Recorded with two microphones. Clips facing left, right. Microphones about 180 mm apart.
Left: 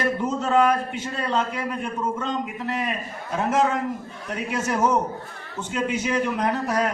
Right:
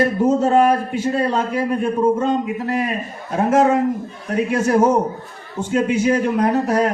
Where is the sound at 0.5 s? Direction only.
35° right (ahead or behind).